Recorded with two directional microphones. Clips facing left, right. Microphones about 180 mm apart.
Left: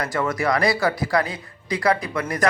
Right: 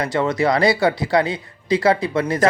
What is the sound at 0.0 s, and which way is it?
Speech, 25° right (ahead or behind).